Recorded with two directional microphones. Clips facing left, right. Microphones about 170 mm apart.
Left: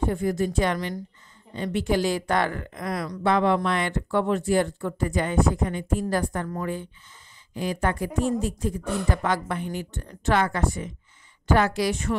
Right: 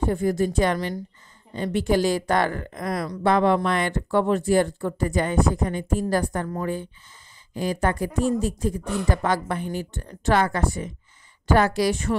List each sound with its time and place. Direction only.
0.1 s speech: 35° right (ahead or behind)